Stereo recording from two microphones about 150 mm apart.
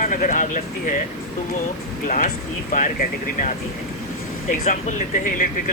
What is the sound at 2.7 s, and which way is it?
Speech, 65° left (ahead or behind).